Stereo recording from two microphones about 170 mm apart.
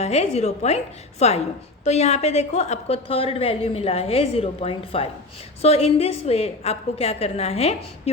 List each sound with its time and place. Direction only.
0.0 s a woman's voice: 40° left (ahead or behind)